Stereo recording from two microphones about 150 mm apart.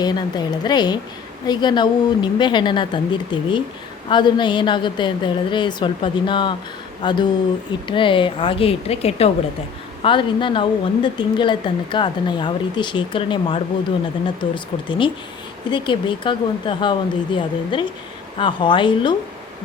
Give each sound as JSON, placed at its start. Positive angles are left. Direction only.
{"t": 0.0, "sound": "a woman's voice", "side_deg": 30}